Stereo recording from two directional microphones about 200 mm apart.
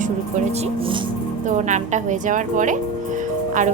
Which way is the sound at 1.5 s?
35° right (ahead or behind).